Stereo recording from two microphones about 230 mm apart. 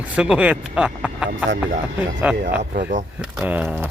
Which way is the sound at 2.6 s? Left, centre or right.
Right.